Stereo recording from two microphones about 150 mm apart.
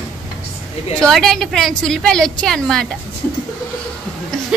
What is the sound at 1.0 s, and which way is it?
A woman's voice, 5° left (ahead or behind).